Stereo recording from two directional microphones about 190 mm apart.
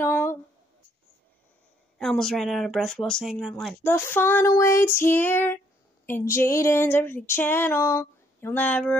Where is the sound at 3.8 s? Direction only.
15° left (ahead or behind).